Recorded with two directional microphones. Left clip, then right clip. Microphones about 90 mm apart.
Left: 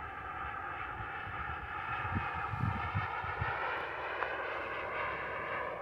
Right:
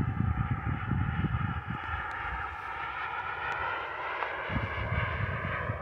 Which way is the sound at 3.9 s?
90° left.